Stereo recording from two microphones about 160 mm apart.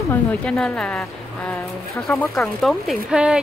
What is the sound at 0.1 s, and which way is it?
A woman's voice, 5° left (ahead or behind).